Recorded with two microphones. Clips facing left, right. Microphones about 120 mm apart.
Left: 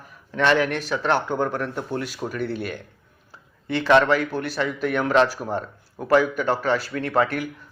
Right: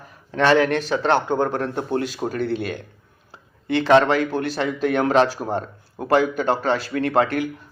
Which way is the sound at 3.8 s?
25° right (ahead or behind).